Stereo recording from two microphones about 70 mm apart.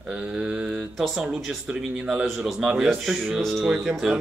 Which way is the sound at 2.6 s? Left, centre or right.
Centre.